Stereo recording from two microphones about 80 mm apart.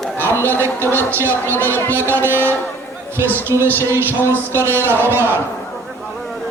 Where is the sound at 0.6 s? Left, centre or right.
Right.